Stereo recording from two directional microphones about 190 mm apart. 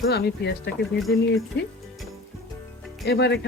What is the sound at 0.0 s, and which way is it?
Speech, 60° left (ahead or behind).